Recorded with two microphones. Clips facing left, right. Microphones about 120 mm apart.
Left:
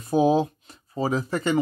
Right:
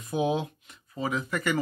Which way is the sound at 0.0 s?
35° left (ahead or behind).